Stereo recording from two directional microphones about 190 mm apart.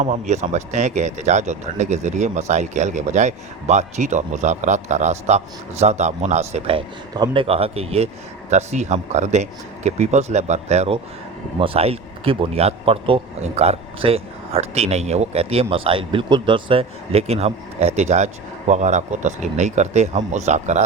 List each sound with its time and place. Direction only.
0.0 s speech: 40° right (ahead or behind)